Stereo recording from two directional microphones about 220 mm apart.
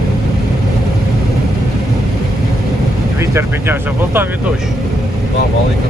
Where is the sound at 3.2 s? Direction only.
10° right (ahead or behind).